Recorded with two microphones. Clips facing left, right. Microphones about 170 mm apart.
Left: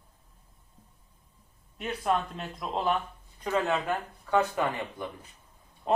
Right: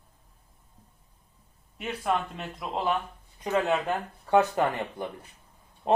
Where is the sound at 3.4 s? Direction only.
15° right (ahead or behind).